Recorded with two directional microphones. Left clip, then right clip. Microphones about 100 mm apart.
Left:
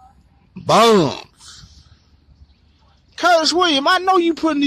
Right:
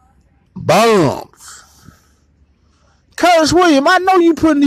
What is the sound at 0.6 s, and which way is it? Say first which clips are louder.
Speech: right 1 dB; 40° right (ahead or behind).